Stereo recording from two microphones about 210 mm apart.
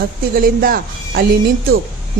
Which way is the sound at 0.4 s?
45° right (ahead or behind).